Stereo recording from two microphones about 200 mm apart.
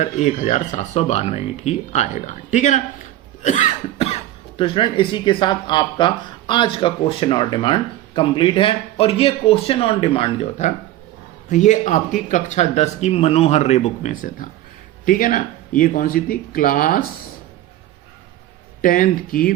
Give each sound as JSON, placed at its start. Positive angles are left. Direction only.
{"t": 0.0, "sound": "speech", "side_deg": 35}
{"t": 18.8, "sound": "speech", "side_deg": 40}